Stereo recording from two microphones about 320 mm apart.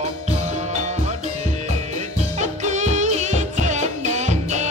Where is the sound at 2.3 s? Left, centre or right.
Right.